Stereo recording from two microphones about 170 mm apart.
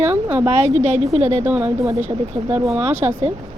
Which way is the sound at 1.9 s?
45° right (ahead or behind).